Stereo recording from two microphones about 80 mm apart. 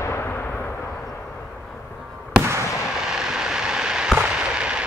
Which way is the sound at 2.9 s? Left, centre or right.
Centre.